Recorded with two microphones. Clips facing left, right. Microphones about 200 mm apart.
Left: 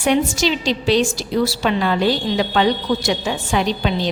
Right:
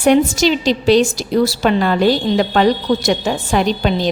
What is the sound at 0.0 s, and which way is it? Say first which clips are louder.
A woman's voice: right 5 dB; 45° right (ahead or behind).